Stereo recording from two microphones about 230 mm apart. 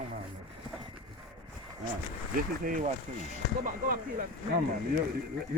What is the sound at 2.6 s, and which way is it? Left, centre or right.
Speech, right.